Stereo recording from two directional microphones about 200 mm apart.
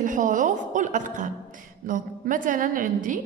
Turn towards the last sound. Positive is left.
turn(degrees=-40)  # may be behind; listen again after turning